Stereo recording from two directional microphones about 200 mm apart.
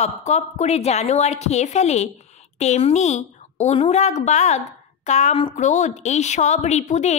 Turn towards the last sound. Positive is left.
turn(degrees=35)  # may be behind; listen again after turning